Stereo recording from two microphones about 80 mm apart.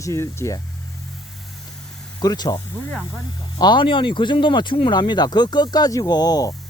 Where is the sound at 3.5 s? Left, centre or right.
Left.